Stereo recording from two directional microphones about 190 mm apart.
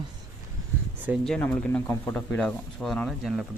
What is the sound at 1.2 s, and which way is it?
Speech, 5° left (ahead or behind).